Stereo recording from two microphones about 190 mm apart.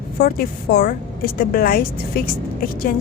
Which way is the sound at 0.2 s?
50° left (ahead or behind).